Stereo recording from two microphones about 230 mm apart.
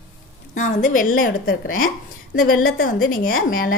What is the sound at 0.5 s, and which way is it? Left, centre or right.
Speech, left.